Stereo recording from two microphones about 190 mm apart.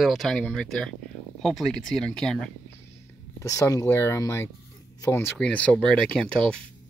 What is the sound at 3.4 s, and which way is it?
Speech, 15° left (ahead or behind).